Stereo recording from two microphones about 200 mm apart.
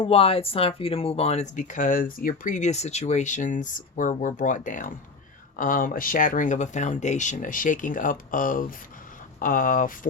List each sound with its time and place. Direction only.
0.0 s speech: 30° left (ahead or behind)